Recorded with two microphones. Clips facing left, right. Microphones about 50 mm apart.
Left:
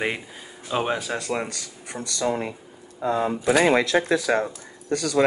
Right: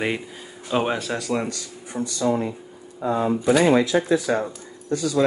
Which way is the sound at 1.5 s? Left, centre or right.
Left.